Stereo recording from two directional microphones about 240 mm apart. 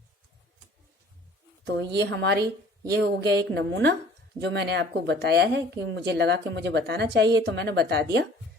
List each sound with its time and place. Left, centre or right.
1.6 s speech: right